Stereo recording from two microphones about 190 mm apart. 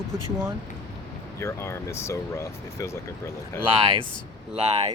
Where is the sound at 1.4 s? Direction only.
15° left (ahead or behind).